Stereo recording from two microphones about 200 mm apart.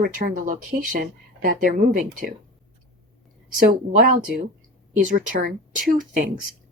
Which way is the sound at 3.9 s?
45° right (ahead or behind).